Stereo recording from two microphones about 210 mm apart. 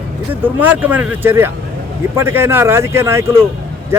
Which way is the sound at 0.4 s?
10° right (ahead or behind).